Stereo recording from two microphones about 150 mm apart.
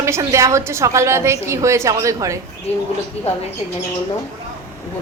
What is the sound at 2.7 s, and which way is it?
Speech, 45° left (ahead or behind).